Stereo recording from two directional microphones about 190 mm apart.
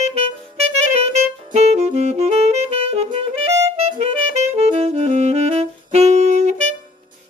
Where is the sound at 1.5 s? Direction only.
35° right (ahead or behind).